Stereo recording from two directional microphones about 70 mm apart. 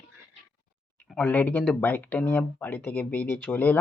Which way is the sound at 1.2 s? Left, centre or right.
Left.